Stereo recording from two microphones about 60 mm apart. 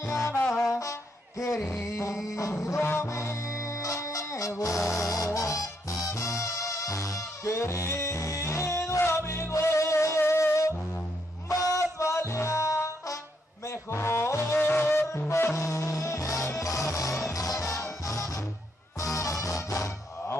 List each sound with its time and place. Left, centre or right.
0.0 s music: left
1.7 s music: left
13.7 s music: left
14.6 s music: left
15.5 s music: left